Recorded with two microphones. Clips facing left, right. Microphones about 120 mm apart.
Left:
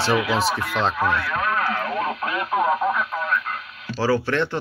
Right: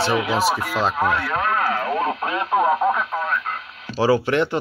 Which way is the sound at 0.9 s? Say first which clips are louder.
Right 2 dB; 25° right (ahead or behind).